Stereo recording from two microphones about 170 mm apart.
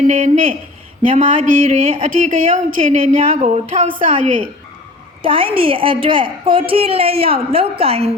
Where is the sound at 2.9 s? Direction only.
40° right (ahead or behind).